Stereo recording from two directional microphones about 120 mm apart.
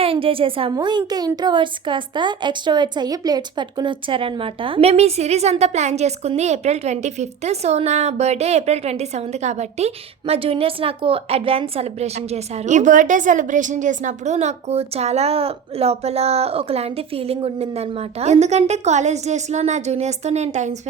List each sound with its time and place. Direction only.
0.0 s a woman's voice: 50° right (ahead or behind)
0.7 s speech: 40° right (ahead or behind); by 20.7 s 70° right (ahead or behind)